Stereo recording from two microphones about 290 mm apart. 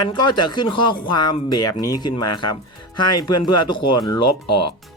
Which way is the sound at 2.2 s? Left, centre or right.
Left.